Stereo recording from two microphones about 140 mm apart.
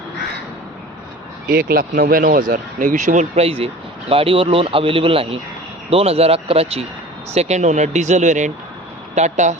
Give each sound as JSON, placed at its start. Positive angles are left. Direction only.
{"t": 1.5, "sound": "speech", "side_deg": -90}